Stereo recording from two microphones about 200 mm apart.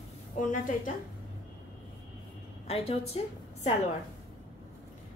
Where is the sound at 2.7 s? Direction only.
30° left (ahead or behind).